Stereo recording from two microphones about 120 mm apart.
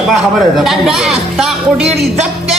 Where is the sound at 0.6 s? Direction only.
Centre (ahead or behind).